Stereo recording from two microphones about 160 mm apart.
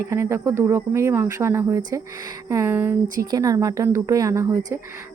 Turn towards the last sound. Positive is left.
turn(degrees=-20)  # may be behind; listen again after turning